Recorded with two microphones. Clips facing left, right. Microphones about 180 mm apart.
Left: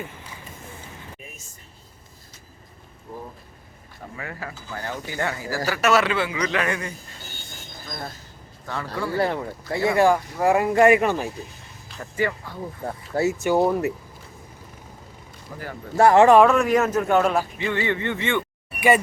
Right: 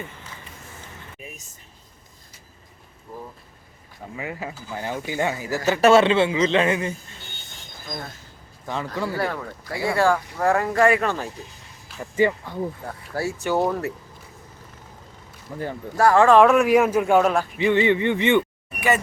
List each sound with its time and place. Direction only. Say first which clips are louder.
4.2 s speech: right 4 dB; 15° right (ahead or behind)
8.6 s speech: right 3 dB; 20° right (ahead or behind)
9.1 s speech: left 3 dB; 25° left (ahead or behind)
12.1 s speech: right 5 dB; 20° right (ahead or behind)
12.9 s speech: left 5 dB; 20° left (ahead or behind)
15.5 s speech: right 6 dB; 20° right (ahead or behind)
16.0 s speech: left 2 dB; 20° left (ahead or behind)
16.4 s speech: right 2 dB; 10° right (ahead or behind)